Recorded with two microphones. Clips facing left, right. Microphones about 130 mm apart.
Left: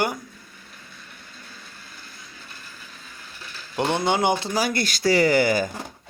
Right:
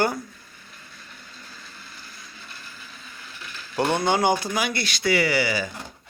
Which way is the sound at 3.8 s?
20° left (ahead or behind).